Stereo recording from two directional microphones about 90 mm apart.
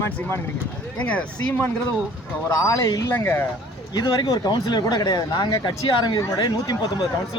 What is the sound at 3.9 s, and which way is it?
Speech, 50° left (ahead or behind).